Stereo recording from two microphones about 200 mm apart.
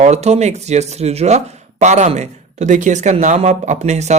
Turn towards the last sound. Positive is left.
turn(degrees=-35)  # may be behind; listen again after turning